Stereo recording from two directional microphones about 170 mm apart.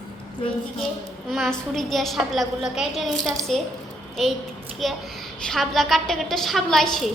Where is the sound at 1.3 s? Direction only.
Centre (ahead or behind).